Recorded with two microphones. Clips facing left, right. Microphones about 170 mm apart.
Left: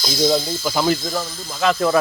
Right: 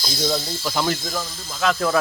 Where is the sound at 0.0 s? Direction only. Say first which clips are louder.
Left 6 dB; 20° left (ahead or behind).